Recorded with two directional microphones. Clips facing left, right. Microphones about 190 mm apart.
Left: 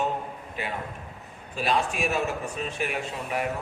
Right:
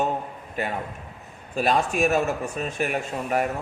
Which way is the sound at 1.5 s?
45° right (ahead or behind).